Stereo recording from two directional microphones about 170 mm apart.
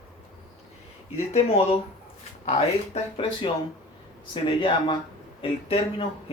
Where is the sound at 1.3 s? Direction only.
35° left (ahead or behind).